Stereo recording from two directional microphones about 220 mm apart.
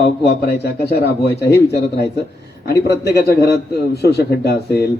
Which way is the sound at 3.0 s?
45° left (ahead or behind).